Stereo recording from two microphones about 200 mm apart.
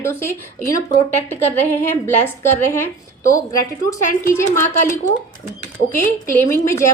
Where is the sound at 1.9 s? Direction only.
10° left (ahead or behind).